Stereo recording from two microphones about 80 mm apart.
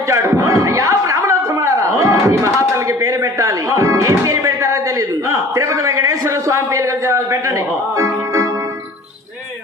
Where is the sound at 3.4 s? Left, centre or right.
Right.